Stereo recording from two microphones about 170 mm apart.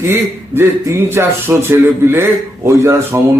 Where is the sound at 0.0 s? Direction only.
15° right (ahead or behind).